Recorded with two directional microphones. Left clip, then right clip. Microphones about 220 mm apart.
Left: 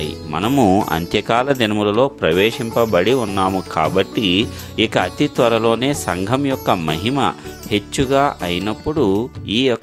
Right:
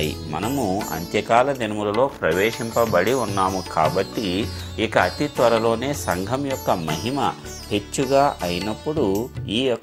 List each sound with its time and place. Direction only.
0.6 s speech: 55° left (ahead or behind)
6.2 s speech: 35° left (ahead or behind)